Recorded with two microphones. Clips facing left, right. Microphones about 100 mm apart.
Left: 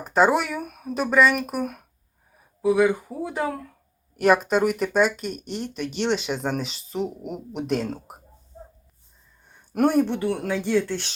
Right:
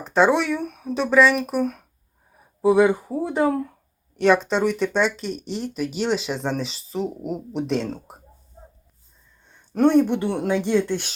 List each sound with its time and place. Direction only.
0.0 s speech: 5° left (ahead or behind)
2.6 s speech: 30° right (ahead or behind)
4.2 s speech: 5° left (ahead or behind)
9.5 s a sound: 10° left (ahead or behind)
10.1 s speech: 25° right (ahead or behind)